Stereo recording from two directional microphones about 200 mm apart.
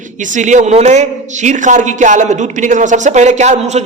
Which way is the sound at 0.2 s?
35° right (ahead or behind).